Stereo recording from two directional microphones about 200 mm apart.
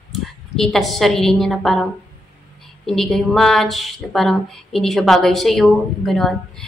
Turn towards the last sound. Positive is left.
turn(degrees=0)  # may be behind; listen again after turning